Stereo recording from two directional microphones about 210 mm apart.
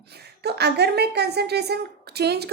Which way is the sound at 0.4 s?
50° right (ahead or behind).